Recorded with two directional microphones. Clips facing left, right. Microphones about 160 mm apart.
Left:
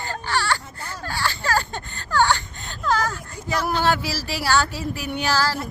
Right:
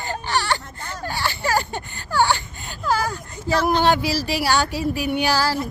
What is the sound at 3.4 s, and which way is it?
Speech, 30° right (ahead or behind).